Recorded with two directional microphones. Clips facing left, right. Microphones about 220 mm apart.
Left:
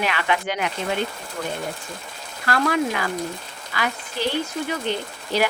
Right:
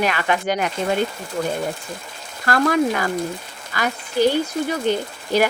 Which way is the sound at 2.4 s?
45° right (ahead or behind).